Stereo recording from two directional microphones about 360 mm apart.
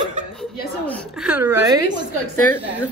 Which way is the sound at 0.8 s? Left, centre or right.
Centre.